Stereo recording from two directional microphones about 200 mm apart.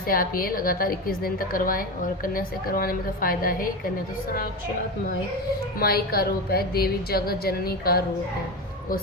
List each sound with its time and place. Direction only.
0.0 s a woman's voice: 45° left (ahead or behind)
5.8 s a woman's voice: 50° left (ahead or behind)